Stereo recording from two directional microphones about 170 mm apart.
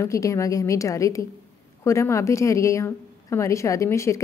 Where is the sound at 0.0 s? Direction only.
20° left (ahead or behind).